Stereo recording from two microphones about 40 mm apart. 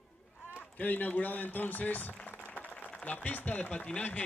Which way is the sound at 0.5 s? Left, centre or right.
Left.